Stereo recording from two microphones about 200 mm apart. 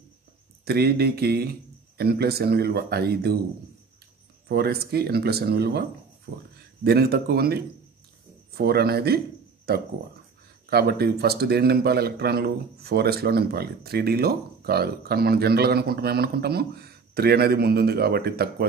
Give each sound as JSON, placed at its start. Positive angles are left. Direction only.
{"t": 0.7, "sound": "a man's voice", "side_deg": -50}
{"t": 4.5, "sound": "a man's voice", "side_deg": -50}